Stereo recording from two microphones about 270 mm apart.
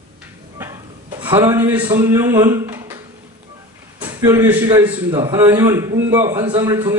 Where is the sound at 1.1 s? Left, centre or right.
Centre.